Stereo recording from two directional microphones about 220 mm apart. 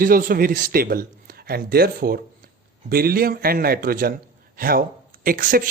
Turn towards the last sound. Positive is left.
turn(degrees=-40)  # may be behind; listen again after turning